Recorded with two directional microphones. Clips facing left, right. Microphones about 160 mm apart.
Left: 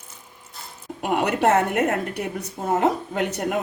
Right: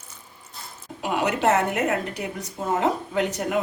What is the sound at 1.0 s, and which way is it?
A woman's voice, 55° left (ahead or behind).